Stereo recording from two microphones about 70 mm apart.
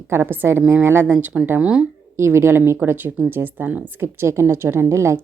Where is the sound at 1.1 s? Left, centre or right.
Centre.